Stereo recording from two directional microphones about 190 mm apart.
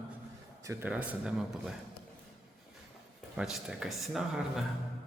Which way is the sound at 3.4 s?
5° right (ahead or behind).